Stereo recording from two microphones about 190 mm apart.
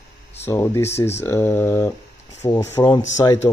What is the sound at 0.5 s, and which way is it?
Speech, 15° left (ahead or behind).